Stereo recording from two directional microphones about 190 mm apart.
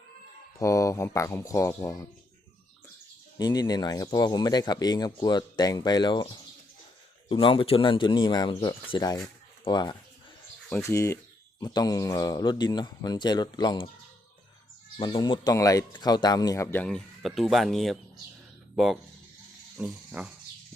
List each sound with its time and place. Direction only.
0.6 s speech: 15° left (ahead or behind)
3.3 s speech: 20° left (ahead or behind)
14.9 s speech: 25° left (ahead or behind); by 20.3 s 5° right (ahead or behind)